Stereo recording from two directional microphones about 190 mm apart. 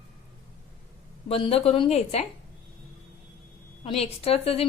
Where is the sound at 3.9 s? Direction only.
30° left (ahead or behind).